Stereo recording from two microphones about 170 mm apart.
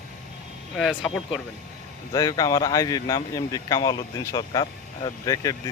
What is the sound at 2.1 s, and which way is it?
Speech, 20° left (ahead or behind).